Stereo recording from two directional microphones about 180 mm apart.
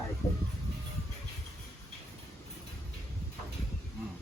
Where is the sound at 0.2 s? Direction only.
35° left (ahead or behind).